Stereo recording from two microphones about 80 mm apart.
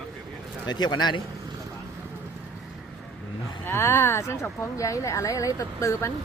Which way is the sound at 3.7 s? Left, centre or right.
Left.